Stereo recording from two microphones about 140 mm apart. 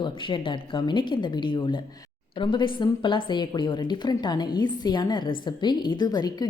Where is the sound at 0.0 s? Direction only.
35° left (ahead or behind).